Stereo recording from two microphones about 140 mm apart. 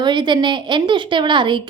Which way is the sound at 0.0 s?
35° right (ahead or behind).